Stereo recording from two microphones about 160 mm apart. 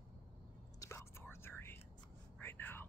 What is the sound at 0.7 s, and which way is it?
Whispering, 15° left (ahead or behind).